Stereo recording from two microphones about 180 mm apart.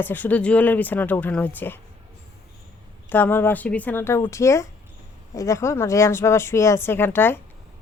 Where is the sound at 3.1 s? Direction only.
10° left (ahead or behind).